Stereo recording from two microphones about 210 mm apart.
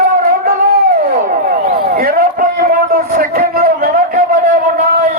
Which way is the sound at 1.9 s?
45° right (ahead or behind).